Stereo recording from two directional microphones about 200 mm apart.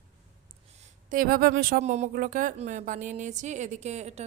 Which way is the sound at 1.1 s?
45° right (ahead or behind).